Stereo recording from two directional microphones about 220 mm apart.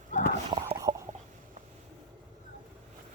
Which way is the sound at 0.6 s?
15° right (ahead or behind).